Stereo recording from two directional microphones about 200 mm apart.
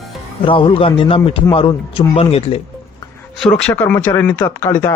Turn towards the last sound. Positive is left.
turn(degrees=15)  # may be behind; listen again after turning